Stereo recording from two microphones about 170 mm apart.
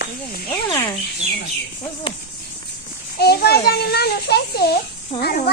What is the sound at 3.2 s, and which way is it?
A child's voice, 70° left (ahead or behind).